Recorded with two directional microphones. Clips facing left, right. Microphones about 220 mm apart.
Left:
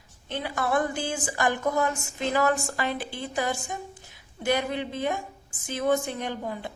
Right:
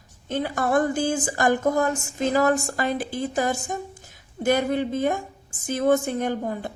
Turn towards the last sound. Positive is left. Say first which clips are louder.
# right 6 dB
turn(degrees=-45)  # may be behind; listen again after turning